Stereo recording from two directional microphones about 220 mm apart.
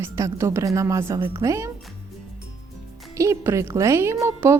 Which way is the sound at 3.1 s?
15° right (ahead or behind).